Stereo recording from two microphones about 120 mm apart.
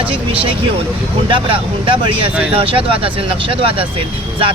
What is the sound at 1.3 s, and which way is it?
Speech, 45° right (ahead or behind).